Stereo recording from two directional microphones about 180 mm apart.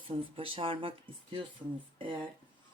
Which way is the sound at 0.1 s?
30° right (ahead or behind).